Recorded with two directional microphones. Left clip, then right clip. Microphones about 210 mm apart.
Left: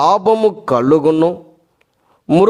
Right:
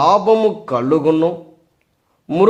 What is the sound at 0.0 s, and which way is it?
Speech, 45° left (ahead or behind).